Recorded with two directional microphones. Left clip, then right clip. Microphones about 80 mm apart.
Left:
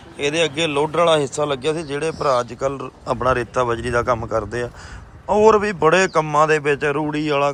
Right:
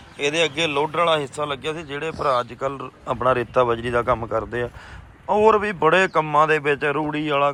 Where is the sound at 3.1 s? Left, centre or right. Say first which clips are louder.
Left 1 dB; centre.